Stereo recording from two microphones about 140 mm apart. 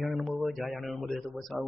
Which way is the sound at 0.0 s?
Centre (ahead or behind).